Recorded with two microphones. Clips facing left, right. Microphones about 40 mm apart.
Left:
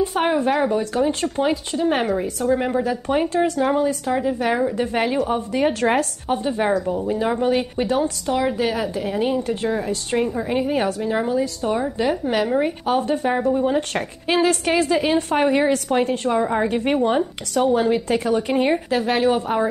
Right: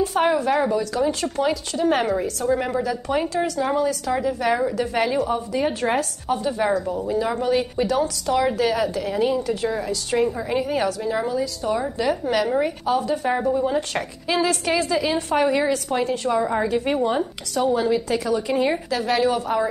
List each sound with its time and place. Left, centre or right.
0.0 s speech: left
0.7 s a woman's voice: left; by 2.9 s centre
2.9 s a woman's voice: left
4.4 s a woman's voice: centre
4.7 s a woman's voice: left
5.3 s a woman's voice: left
6.2 s a woman's voice: left
8.3 s a woman's voice: centre
9.2 s a woman's voice: left
10.2 s speech: left
12.8 s a woman's voice: left
16.3 s speech: left
16.6 s a woman's voice: left